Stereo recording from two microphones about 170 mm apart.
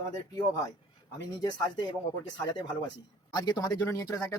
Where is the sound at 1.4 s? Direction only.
25° left (ahead or behind).